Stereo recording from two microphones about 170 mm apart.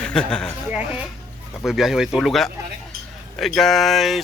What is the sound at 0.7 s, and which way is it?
Speech, 5° right (ahead or behind).